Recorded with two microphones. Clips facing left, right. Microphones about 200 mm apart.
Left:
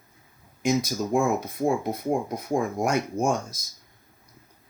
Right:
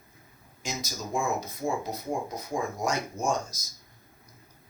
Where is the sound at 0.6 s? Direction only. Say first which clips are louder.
Left 12 dB; 60° left (ahead or behind).